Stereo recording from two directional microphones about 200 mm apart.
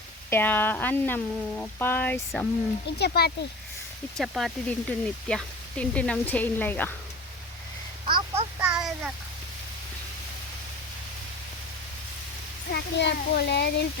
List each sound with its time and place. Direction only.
0.3 s speech: 10° left (ahead or behind)
3.0 s speech: 50° left (ahead or behind)
4.2 s speech: centre (ahead or behind)
8.0 s a sound: 25° right (ahead or behind)
8.5 s a sound: 5° right (ahead or behind)
12.7 s a child's voice: 55° left (ahead or behind)